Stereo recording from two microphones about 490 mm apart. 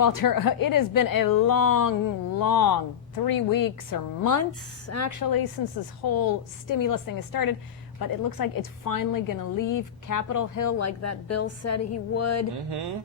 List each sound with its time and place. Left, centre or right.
0.0 s a woman's voice: left
12.7 s speech: right